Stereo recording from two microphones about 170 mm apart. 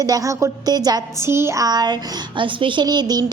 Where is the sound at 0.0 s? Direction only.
20° right (ahead or behind).